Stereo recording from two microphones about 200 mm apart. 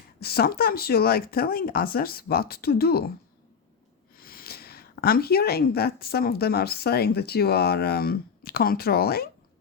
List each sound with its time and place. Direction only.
0.2 s speech: 50° left (ahead or behind)
4.2 s speech: 45° left (ahead or behind)